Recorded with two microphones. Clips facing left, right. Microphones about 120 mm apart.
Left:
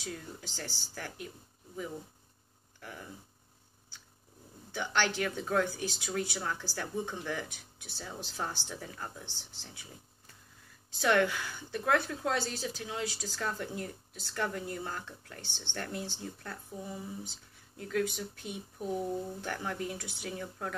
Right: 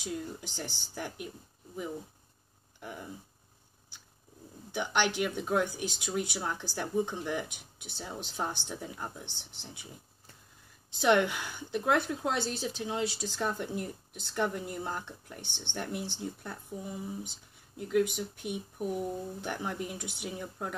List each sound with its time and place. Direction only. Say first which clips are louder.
0.0 s speech: right 5 dB; 15° right (ahead or behind)
2.8 s a woman's voice: right 4 dB; 20° right (ahead or behind)
4.7 s a woman's voice: right 2 dB; 15° right (ahead or behind)
11.0 s a woman's voice: right 2 dB; 20° right (ahead or behind)